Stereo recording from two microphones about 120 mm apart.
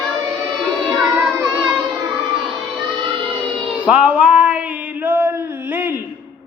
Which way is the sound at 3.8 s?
10° right (ahead or behind).